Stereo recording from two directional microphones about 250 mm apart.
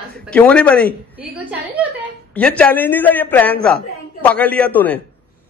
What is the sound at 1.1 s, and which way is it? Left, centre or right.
Speech, centre.